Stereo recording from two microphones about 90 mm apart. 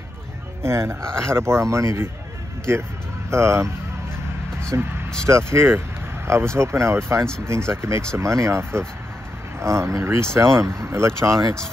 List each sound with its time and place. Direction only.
0.6 s speech: 30° right (ahead or behind)